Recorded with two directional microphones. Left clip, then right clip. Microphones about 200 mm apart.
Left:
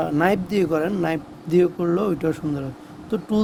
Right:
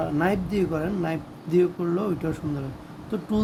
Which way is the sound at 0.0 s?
45° left (ahead or behind).